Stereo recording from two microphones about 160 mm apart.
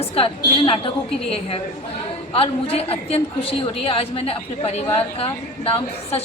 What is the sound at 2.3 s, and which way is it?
A woman's voice, 35° left (ahead or behind).